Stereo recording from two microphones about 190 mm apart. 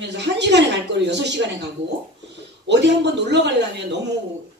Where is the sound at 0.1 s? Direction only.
65° right (ahead or behind).